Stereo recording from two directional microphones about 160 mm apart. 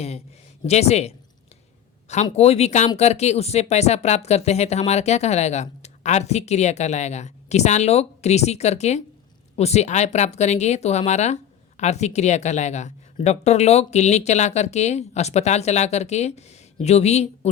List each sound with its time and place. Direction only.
0.7 s a woman's voice: 40° left (ahead or behind)
2.3 s speech: 40° left (ahead or behind)